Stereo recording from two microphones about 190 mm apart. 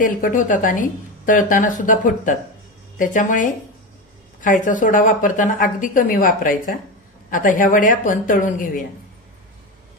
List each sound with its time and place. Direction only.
0.0 s a woman's voice: 45° left (ahead or behind)